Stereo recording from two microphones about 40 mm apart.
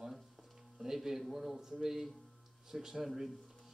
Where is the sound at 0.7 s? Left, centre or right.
Centre.